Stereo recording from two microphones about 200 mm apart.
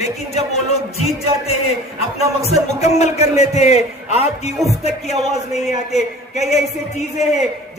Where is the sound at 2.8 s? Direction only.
35° left (ahead or behind).